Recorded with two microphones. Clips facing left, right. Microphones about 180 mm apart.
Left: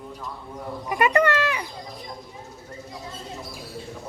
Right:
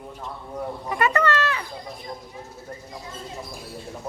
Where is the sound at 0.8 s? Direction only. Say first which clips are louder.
Left 2 dB; 15° left (ahead or behind).